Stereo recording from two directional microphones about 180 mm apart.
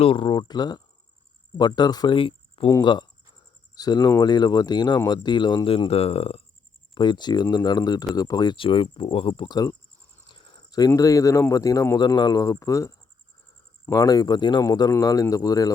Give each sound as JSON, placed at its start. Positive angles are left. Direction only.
{"t": 0.0, "sound": "a man's voice", "side_deg": 30}